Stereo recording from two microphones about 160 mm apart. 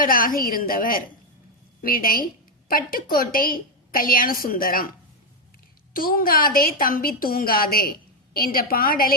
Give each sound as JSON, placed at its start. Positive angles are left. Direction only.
{"t": 0.0, "sound": "a woman's voice", "side_deg": 60}
{"t": 5.9, "sound": "a woman's voice", "side_deg": 65}